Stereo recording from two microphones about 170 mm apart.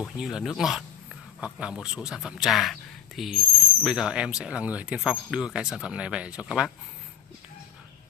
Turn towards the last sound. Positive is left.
turn(degrees=-5)  # may be behind; listen again after turning